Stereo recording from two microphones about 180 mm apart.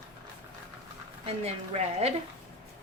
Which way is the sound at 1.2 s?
35° right (ahead or behind).